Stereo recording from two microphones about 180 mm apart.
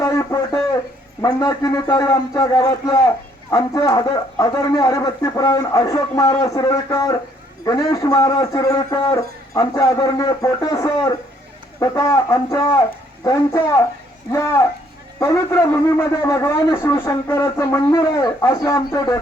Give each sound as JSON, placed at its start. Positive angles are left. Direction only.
{"t": 0.0, "sound": "a sound", "side_deg": 20}
{"t": 1.2, "sound": "a man's voice", "side_deg": 20}
{"t": 15.2, "sound": "a man's voice", "side_deg": 15}